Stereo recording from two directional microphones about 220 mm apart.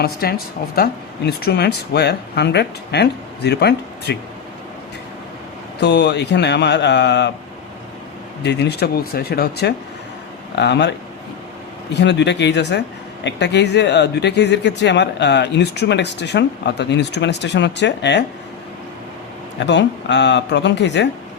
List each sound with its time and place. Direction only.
0.0 s speech: 45° left (ahead or behind)
5.8 s speech: 50° left (ahead or behind)
8.4 s speech: 50° left (ahead or behind)
11.9 s speech: 55° left (ahead or behind)
19.5 s speech: 55° left (ahead or behind)